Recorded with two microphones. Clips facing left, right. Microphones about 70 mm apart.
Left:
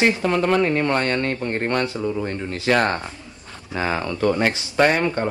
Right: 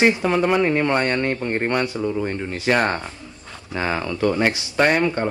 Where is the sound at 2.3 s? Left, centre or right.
Centre.